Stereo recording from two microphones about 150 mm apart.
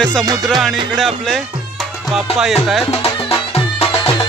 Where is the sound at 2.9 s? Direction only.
40° left (ahead or behind).